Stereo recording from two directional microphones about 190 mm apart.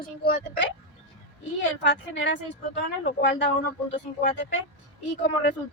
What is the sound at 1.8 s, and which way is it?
Speech, 70° left (ahead or behind).